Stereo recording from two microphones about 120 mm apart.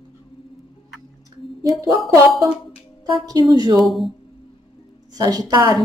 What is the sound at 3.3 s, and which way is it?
Speech, 35° right (ahead or behind).